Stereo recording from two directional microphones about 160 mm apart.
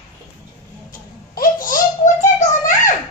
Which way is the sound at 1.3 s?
60° left (ahead or behind).